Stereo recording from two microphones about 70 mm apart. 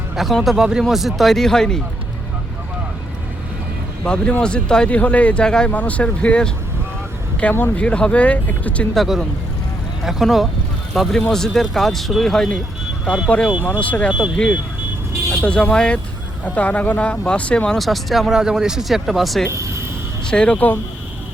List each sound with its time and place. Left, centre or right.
0.2 s speech: centre
4.0 s speech: centre
9.0 s speech: centre
13.8 s speech: centre
14.1 s speech: centre
15.3 s vehicle: centre
15.7 s speech: centre
17.7 s speech: centre
19.5 s speech: right
20.2 s speech: centre